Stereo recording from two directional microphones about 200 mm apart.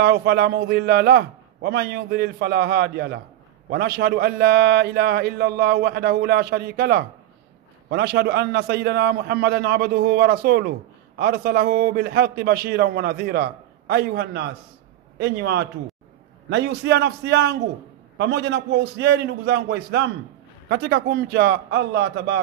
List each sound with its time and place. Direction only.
0.0 s a man's voice: 55° right (ahead or behind)